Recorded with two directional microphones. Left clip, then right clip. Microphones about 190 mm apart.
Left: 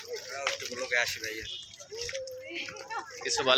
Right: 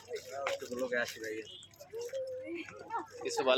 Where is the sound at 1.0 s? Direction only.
15° right (ahead or behind).